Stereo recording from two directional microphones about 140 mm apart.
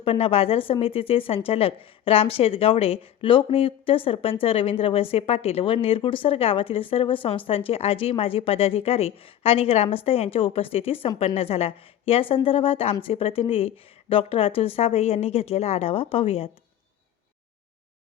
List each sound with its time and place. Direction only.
0.0 s a woman's voice: 40° left (ahead or behind)